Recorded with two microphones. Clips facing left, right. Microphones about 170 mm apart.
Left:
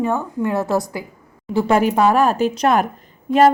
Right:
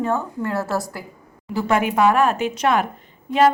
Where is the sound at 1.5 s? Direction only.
35° left (ahead or behind).